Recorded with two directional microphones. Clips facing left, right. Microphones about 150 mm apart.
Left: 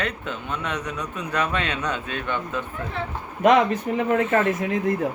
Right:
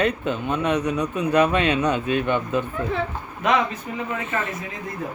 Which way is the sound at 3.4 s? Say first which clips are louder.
Left 5 dB; 50° left (ahead or behind).